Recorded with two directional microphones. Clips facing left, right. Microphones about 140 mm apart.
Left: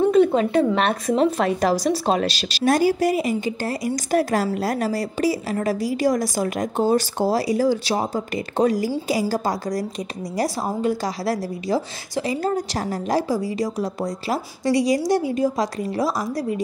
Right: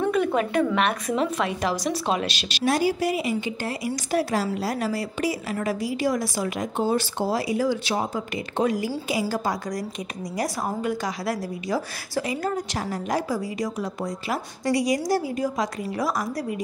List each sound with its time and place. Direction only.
0.0 s a woman's voice: 25° left (ahead or behind)